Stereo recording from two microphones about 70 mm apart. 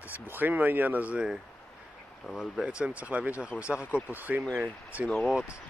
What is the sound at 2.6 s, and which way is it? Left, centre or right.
Speech, centre.